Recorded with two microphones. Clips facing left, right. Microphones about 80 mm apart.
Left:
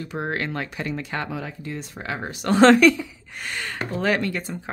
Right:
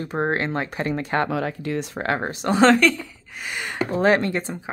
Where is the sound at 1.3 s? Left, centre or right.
Right.